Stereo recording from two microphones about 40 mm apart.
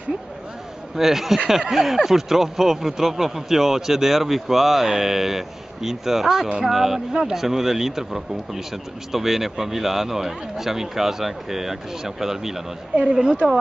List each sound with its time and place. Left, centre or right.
0.9 s speech: centre
13.1 s speech: centre